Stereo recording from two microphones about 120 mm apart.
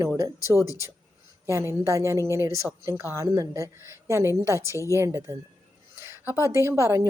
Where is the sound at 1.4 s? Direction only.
25° right (ahead or behind).